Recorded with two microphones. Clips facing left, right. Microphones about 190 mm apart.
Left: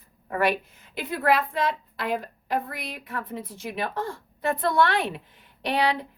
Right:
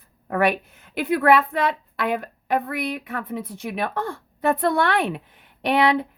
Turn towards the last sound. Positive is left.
turn(degrees=-60)  # may be behind; listen again after turning